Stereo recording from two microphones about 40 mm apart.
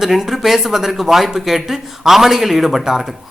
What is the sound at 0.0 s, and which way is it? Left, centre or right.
A woman's voice, centre.